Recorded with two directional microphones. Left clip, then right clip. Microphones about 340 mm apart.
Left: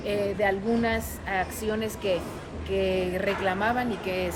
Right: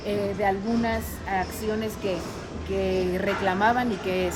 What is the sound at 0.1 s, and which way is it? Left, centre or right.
A woman's voice, centre.